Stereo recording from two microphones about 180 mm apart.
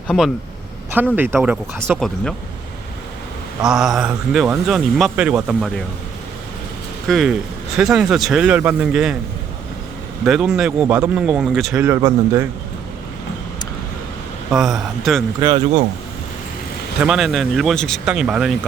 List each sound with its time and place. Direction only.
1.1 s a man's voice: 10° right (ahead or behind)
3.6 s a man's voice: 5° right (ahead or behind)
7.1 s a man's voice: centre (ahead or behind)
10.2 s a man's voice: 5° right (ahead or behind)
11.8 s speech: 15° right (ahead or behind)
14.5 s a man's voice: centre (ahead or behind)
15.4 s speech: 15° right (ahead or behind)
17.0 s a man's voice: 5° right (ahead or behind)